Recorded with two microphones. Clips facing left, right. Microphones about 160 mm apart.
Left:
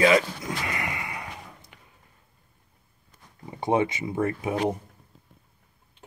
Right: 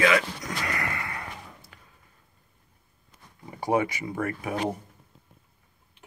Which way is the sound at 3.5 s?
25° left (ahead or behind).